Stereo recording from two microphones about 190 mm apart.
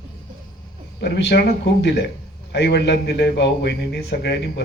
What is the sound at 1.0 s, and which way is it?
Speech, 65° left (ahead or behind).